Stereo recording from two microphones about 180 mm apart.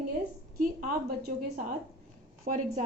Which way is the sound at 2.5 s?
50° right (ahead or behind).